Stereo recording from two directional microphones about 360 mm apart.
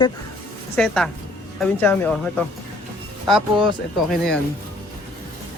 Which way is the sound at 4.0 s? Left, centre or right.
Centre.